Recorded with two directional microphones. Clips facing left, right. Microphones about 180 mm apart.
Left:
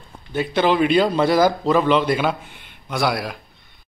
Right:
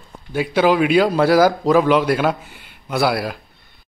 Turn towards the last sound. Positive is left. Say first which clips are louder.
# right 3 dB
turn(degrees=-5)  # may be behind; listen again after turning